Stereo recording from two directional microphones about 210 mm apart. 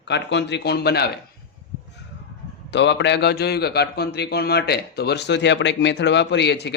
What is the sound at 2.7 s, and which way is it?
A man's voice, 55° left (ahead or behind).